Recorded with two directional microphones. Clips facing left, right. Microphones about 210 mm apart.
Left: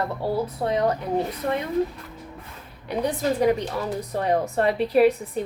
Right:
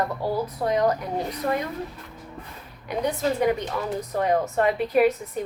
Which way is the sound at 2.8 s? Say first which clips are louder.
Left 1 dB; 35° left (ahead or behind).